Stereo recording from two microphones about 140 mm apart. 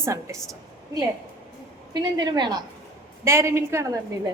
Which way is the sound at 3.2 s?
20° right (ahead or behind).